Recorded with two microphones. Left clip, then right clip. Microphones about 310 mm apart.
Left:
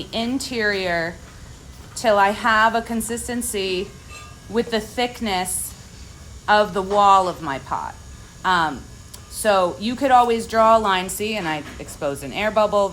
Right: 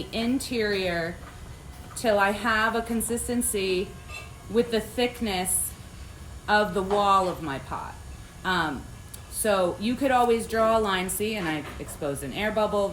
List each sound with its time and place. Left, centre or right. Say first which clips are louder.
0.4 s speech: left 7 dB; centre